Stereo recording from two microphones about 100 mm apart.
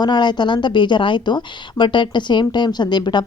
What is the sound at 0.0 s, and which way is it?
Speech, 50° left (ahead or behind).